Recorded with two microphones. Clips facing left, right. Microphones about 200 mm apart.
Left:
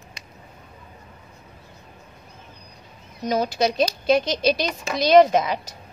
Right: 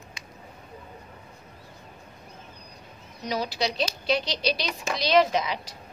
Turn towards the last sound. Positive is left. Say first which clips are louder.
# left 6 dB
turn(degrees=50)  # may be behind; listen again after turning